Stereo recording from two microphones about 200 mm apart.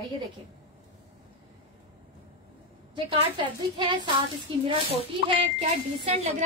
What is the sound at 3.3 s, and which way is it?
Speech, 25° right (ahead or behind).